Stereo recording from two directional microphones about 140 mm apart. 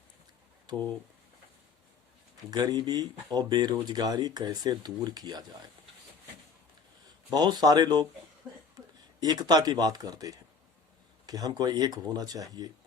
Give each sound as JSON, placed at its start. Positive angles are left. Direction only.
{"t": 2.5, "sound": "speech", "side_deg": -30}
{"t": 7.3, "sound": "speech", "side_deg": -30}
{"t": 9.2, "sound": "speech", "side_deg": -30}